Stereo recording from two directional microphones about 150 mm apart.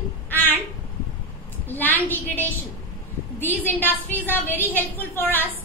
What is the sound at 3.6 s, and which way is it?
A woman's voice, 10° left (ahead or behind).